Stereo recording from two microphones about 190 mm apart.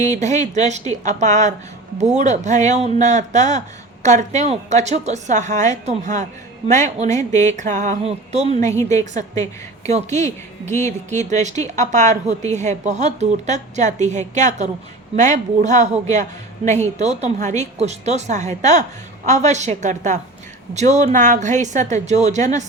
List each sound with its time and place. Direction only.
0.1 s a woman's voice: 40° right (ahead or behind)
8.6 s a woman's voice: 15° left (ahead or behind)
9.9 s a woman's voice: 40° right (ahead or behind)